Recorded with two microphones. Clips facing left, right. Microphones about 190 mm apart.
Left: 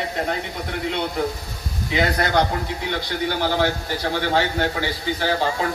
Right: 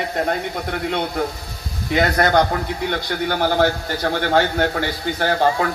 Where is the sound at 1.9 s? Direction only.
50° right (ahead or behind).